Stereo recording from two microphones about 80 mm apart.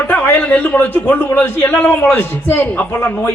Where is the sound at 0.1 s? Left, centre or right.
Centre.